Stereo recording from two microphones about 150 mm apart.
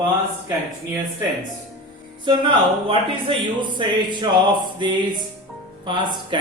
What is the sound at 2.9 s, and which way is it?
A man's voice, 35° right (ahead or behind).